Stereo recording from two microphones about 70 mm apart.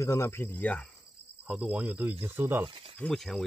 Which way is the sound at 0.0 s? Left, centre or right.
Left.